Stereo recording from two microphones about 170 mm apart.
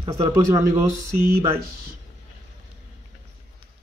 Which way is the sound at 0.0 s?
20° right (ahead or behind).